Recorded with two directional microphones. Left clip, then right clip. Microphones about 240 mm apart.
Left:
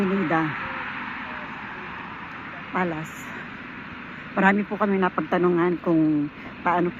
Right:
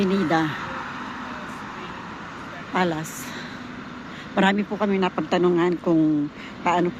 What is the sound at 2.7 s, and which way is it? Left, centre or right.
Speech, centre.